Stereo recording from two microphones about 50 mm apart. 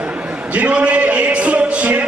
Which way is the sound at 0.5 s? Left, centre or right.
Right.